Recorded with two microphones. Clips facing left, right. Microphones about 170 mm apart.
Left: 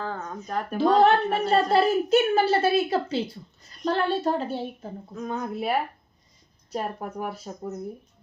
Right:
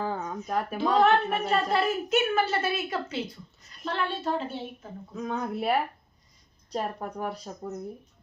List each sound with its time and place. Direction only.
0.0 s a sound: 10° right (ahead or behind)
0.9 s a child's voice: 35° left (ahead or behind)
5.1 s a woman's voice: centre (ahead or behind)